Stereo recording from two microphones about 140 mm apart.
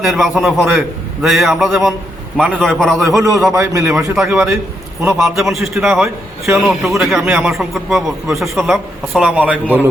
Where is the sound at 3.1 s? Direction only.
25° right (ahead or behind).